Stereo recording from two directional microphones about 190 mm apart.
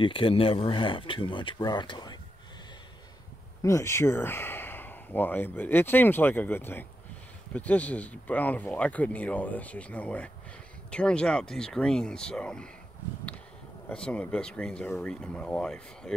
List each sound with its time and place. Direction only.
0.0 s speech: 30° left (ahead or behind)
3.6 s speech: 15° left (ahead or behind)
13.8 s speech: 5° left (ahead or behind)